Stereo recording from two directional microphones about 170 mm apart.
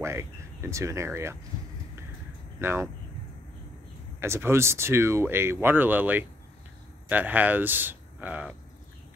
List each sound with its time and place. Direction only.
0.0 s speech: 15° right (ahead or behind)
2.6 s speech: 15° right (ahead or behind)
4.2 s speech: 15° right (ahead or behind)